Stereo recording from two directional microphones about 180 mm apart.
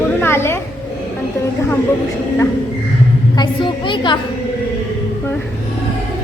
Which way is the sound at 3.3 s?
25° left (ahead or behind).